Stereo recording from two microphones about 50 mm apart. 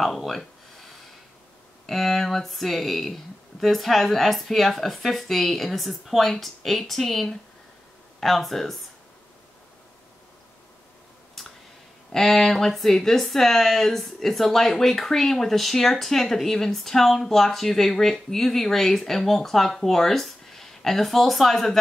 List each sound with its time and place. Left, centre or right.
0.0 s a sound: centre
1.9 s speech: centre
11.4 s clicking: centre
12.1 s speech: centre